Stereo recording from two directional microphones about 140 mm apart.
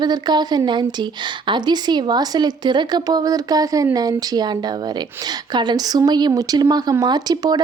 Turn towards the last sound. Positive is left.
turn(degrees=-30)  # may be behind; listen again after turning